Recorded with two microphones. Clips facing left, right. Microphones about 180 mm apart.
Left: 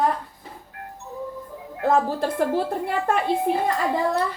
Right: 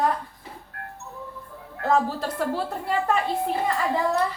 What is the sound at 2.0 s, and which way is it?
Speech, 50° left (ahead or behind).